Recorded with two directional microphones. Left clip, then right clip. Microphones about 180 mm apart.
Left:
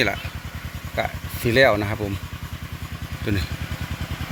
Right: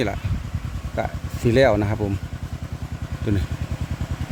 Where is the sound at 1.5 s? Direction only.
25° right (ahead or behind).